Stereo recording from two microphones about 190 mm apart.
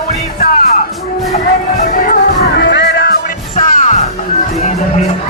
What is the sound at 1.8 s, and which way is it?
Music, 50° left (ahead or behind).